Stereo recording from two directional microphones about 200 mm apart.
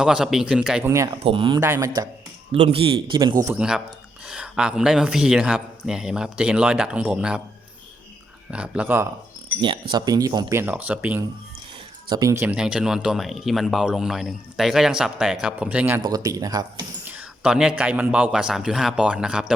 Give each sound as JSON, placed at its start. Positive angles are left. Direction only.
{"t": 0.0, "sound": "speech", "side_deg": 0}
{"t": 0.9, "sound": "speech", "side_deg": -15}
{"t": 1.2, "sound": "speech", "side_deg": -25}
{"t": 1.6, "sound": "speech", "side_deg": -15}
{"t": 2.5, "sound": "speech", "side_deg": -30}
{"t": 3.6, "sound": "speech", "side_deg": -5}
{"t": 8.4, "sound": "speech", "side_deg": -5}
{"t": 9.9, "sound": "speech", "side_deg": -20}
{"t": 16.0, "sound": "speech", "side_deg": -20}
{"t": 17.1, "sound": "speech", "side_deg": -5}